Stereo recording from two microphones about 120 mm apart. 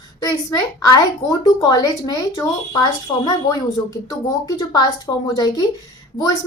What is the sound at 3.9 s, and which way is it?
A woman's voice, 30° left (ahead or behind).